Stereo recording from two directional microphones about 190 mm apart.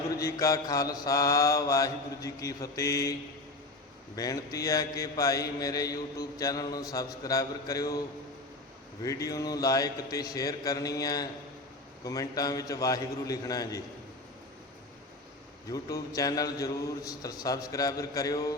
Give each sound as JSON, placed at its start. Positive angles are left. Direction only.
{"t": 0.2, "sound": "mantra", "side_deg": 15}
{"t": 4.1, "sound": "a man's voice", "side_deg": 20}
{"t": 9.0, "sound": "a man's voice", "side_deg": 20}
{"t": 15.7, "sound": "a man's voice", "side_deg": 20}